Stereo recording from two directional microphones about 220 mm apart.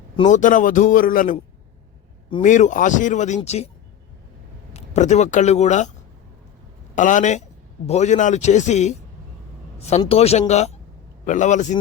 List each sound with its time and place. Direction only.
0.2 s speech: 35° left (ahead or behind)
2.4 s speech: 35° left (ahead or behind)
4.7 s speech: 30° left (ahead or behind)
6.9 s speech: 35° left (ahead or behind)
10.0 s speech: 25° left (ahead or behind)